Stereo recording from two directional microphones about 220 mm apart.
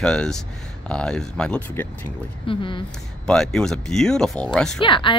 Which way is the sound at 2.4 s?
20° left (ahead or behind).